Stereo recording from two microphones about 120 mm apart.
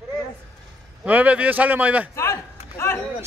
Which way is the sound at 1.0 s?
10° right (ahead or behind).